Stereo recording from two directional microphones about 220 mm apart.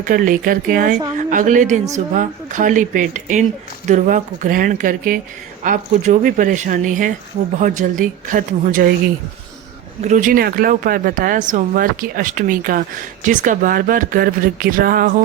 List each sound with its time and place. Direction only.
0.0 s speech: 40° right (ahead or behind)
10.0 s speech: 35° right (ahead or behind)